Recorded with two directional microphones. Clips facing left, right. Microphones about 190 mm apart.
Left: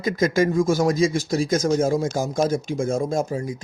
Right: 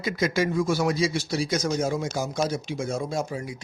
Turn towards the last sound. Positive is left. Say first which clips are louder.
# left 5 dB
turn(degrees=45)  # may be behind; listen again after turning